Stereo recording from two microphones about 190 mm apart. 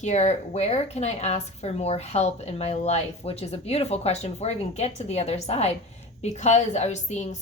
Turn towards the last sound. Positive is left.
turn(degrees=40)  # may be behind; listen again after turning